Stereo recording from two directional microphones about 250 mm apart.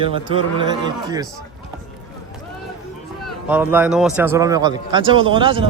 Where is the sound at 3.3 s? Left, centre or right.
Centre.